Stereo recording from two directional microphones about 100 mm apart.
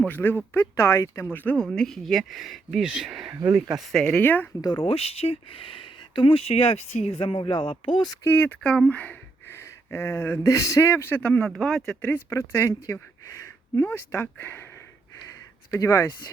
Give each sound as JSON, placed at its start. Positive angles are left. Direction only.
{"t": 0.0, "sound": "speech", "side_deg": 20}
{"t": 1.5, "sound": "speech", "side_deg": 10}
{"t": 4.2, "sound": "speech", "side_deg": 20}
{"t": 4.8, "sound": "speech", "side_deg": 75}
{"t": 8.2, "sound": "speech", "side_deg": 20}
{"t": 11.4, "sound": "speech", "side_deg": 5}
{"t": 12.0, "sound": "speech", "side_deg": 20}